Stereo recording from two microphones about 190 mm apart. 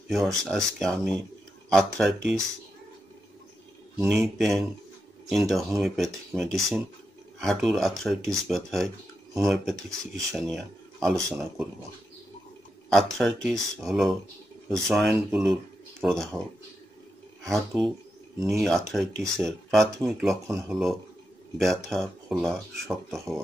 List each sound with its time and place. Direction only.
0.5 s speech: centre (ahead or behind)
4.1 s speech: centre (ahead or behind)
11.1 s speech: 15° right (ahead or behind)
12.9 s speech: centre (ahead or behind)
17.5 s speech: centre (ahead or behind)